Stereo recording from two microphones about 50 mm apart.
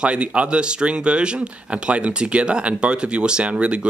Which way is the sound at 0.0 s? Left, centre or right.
Right.